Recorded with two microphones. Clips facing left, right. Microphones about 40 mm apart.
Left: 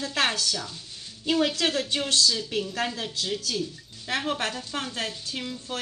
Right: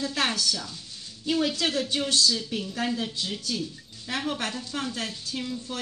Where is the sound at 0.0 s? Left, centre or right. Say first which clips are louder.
Left 1 dB; left.